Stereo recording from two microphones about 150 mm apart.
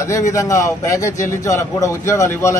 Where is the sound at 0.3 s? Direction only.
20° left (ahead or behind).